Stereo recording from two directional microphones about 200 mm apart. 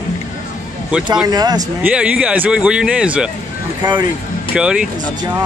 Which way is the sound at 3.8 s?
20° right (ahead or behind).